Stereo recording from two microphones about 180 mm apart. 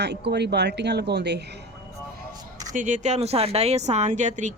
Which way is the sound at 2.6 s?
45° right (ahead or behind).